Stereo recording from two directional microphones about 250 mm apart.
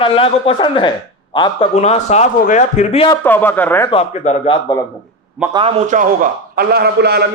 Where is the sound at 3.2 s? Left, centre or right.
Centre.